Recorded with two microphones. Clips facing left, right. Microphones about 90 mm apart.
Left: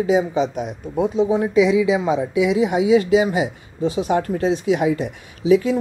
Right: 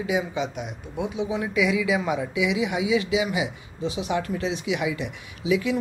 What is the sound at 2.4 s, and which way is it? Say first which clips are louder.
Speech: left 7 dB; 40° left (ahead or behind).